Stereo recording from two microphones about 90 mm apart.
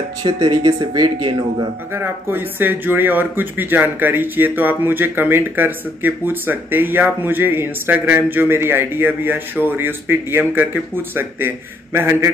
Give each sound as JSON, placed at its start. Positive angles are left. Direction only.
{"t": 0.4, "sound": "speech", "side_deg": -45}
{"t": 1.9, "sound": "speech", "side_deg": -25}